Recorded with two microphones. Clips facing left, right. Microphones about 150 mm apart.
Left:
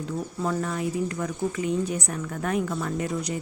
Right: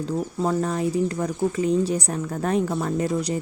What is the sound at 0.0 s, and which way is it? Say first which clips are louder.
Speech: right 4 dB; 35° right (ahead or behind).